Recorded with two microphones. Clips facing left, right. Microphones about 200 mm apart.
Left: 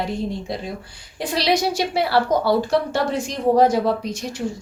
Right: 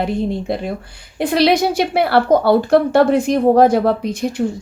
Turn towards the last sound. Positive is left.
turn(degrees=-55)  # may be behind; listen again after turning